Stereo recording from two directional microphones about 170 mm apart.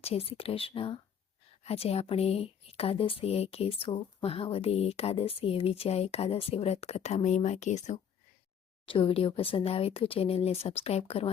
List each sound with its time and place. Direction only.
0.0 s speech: 35° left (ahead or behind)
8.9 s speech: 30° left (ahead or behind)